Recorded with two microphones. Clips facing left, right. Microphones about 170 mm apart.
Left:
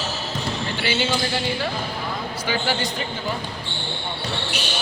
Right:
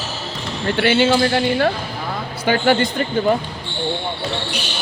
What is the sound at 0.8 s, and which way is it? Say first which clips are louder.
Speech: right 10 dB; 60° right (ahead or behind).